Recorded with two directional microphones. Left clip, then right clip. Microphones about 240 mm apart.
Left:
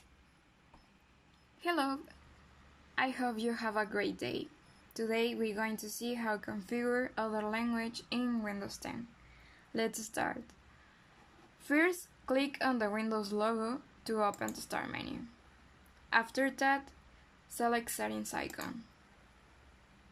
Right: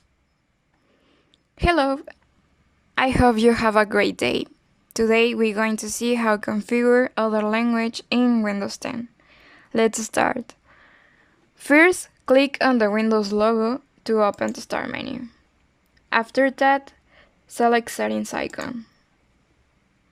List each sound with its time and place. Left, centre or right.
1.5 s a woman's voice: right
11.6 s speech: right